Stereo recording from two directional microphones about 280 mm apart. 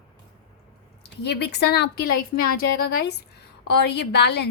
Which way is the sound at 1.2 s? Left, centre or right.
Left.